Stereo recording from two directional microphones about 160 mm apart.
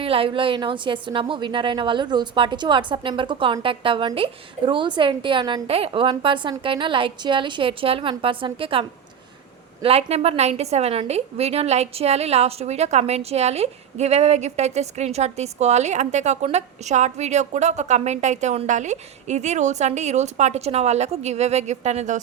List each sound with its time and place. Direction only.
0.0 s a woman's voice: 35° right (ahead or behind)